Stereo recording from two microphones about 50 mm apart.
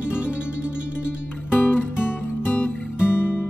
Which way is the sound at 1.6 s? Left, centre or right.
Left.